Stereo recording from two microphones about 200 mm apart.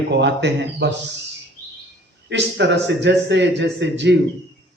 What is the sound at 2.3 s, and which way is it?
A man's voice, 60° right (ahead or behind).